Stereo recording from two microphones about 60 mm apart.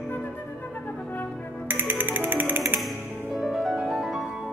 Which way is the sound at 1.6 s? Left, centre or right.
Right.